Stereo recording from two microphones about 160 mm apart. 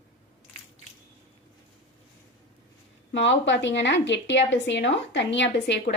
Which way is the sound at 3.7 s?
90° left.